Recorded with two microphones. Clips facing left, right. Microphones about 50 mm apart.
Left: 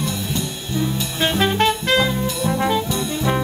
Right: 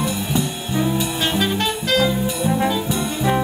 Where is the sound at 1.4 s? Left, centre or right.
Left.